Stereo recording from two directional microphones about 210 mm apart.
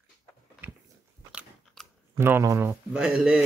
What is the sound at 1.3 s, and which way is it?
Speech, 5° right (ahead or behind).